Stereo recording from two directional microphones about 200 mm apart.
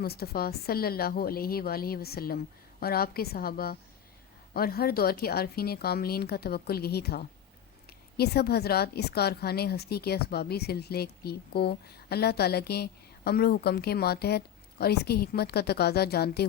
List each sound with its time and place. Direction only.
0.0 s a woman's voice: 50° left (ahead or behind)